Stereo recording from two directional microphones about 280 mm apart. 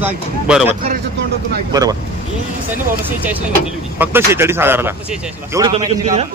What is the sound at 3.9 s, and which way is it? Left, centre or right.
A man's voice, centre.